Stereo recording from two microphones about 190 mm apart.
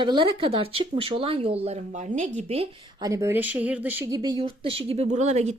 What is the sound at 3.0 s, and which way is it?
Speech, 15° right (ahead or behind).